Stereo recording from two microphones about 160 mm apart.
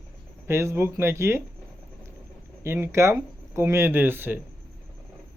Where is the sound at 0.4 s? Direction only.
15° right (ahead or behind).